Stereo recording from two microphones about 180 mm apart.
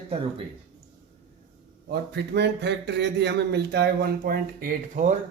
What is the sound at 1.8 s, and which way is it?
A man's voice, 65° right (ahead or behind).